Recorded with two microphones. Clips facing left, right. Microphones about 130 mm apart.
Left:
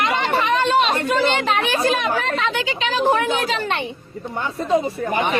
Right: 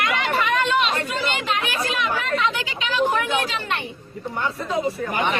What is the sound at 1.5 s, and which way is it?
A man's voice, 30° left (ahead or behind).